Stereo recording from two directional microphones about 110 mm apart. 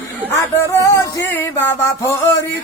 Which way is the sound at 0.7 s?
30° left (ahead or behind).